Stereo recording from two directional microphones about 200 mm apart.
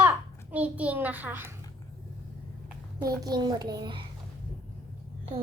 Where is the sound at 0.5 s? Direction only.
5° right (ahead or behind).